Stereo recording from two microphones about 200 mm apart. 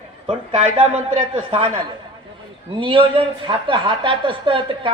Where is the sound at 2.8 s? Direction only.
25° right (ahead or behind).